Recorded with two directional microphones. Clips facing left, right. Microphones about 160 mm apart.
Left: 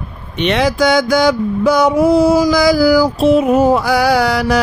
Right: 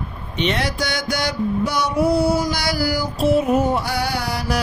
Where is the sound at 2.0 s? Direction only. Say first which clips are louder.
Left 3 dB; 90° left.